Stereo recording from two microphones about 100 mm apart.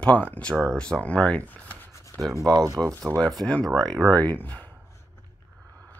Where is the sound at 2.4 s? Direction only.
35° right (ahead or behind).